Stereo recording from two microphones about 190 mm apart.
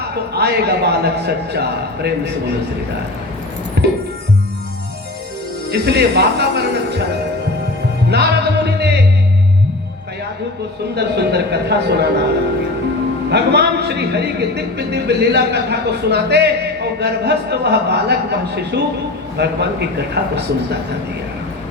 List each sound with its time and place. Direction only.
0.3 s a man's voice: 60° right (ahead or behind)
3.8 s a man's voice: 60° right (ahead or behind)
5.7 s a man's voice: 60° right (ahead or behind)
8.1 s music: 60° right (ahead or behind)
10.9 s a man's voice: 60° right (ahead or behind)
13.3 s a man's voice: 60° right (ahead or behind)